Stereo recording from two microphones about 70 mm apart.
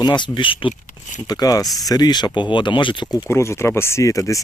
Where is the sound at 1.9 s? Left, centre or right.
Left.